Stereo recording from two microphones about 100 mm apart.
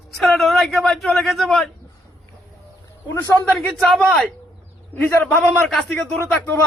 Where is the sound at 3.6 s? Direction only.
Centre (ahead or behind).